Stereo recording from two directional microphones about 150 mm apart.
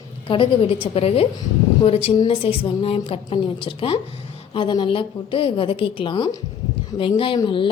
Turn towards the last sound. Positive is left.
turn(degrees=35)  # may be behind; listen again after turning